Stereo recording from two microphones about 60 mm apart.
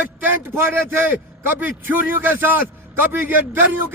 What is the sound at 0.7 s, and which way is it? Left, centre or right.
A man's voice, right.